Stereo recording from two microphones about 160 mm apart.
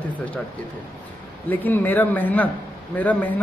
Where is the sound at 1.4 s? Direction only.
10° left (ahead or behind).